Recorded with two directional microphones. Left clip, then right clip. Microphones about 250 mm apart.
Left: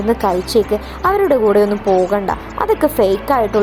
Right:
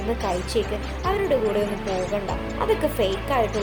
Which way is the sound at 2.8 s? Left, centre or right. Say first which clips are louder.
Left 10 dB; left.